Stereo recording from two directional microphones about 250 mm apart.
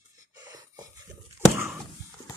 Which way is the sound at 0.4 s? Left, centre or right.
Centre.